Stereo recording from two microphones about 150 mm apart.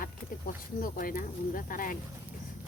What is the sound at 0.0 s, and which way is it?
Speech, 70° left (ahead or behind).